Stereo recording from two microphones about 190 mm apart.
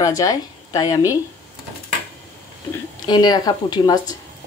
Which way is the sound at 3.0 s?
20° left (ahead or behind).